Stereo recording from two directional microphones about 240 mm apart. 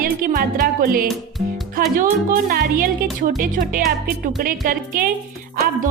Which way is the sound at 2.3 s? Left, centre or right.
Right.